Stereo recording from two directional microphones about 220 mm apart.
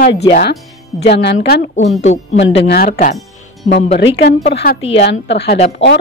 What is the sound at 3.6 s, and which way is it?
Speech, 30° left (ahead or behind).